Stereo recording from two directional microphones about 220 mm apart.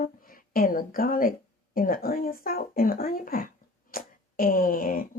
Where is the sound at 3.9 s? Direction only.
40° left (ahead or behind).